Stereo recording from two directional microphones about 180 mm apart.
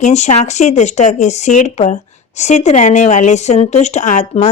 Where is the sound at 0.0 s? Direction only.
40° left (ahead or behind).